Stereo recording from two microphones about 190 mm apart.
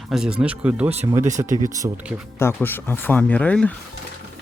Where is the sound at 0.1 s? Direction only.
5° right (ahead or behind).